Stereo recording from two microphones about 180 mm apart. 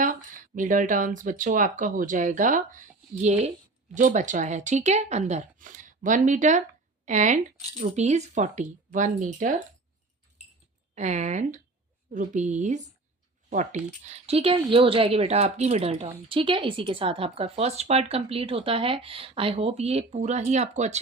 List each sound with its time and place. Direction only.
0.0 s speech: 45° right (ahead or behind)
10.9 s speech: 40° right (ahead or behind)